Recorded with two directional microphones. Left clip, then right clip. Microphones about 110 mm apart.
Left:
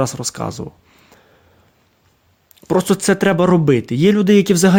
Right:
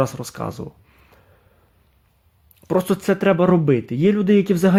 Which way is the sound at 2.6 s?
20° left (ahead or behind).